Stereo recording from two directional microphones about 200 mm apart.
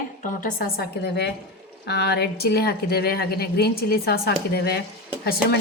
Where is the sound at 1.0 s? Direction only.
55° left (ahead or behind).